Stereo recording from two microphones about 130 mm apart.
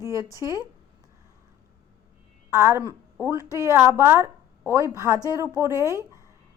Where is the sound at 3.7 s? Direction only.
20° right (ahead or behind).